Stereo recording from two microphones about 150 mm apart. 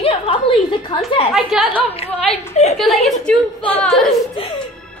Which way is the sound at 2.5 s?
50° left (ahead or behind).